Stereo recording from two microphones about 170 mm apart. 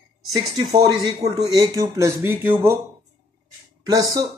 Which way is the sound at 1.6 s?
20° right (ahead or behind).